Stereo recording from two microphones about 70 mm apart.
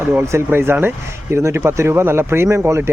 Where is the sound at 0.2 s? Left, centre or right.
Right.